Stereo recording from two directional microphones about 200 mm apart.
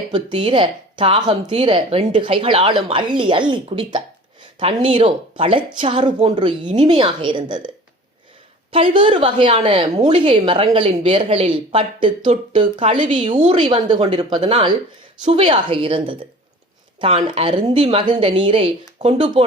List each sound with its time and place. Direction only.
0.1 s a woman's voice: 25° right (ahead or behind)
9.2 s a woman's voice: 25° right (ahead or behind)